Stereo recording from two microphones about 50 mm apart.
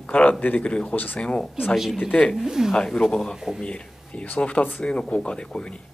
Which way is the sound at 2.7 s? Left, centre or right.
Centre.